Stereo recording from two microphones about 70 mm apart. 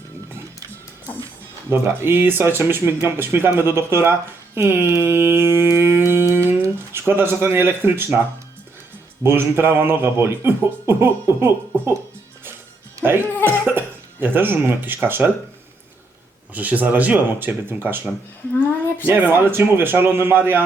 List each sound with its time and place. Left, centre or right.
1.7 s speech: right
4.5 s a sound: right
7.1 s speech: right
9.2 s speech: right
13.4 s speech: right
16.6 s speech: right